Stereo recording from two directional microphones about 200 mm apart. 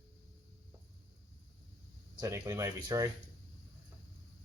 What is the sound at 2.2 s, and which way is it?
Speech, 15° right (ahead or behind).